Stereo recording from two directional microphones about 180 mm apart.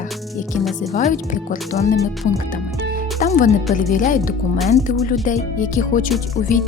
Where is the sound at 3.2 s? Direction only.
45° left (ahead or behind).